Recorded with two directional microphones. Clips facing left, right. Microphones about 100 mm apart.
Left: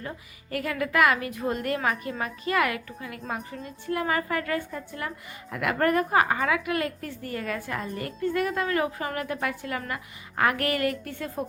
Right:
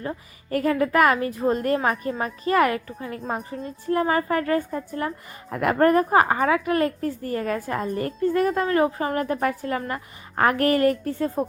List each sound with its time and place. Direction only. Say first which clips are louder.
0.5 s a woman's voice: right 6 dB; 35° right (ahead or behind)